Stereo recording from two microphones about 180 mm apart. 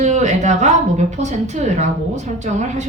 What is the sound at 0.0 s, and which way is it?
A woman's voice, 40° right (ahead or behind).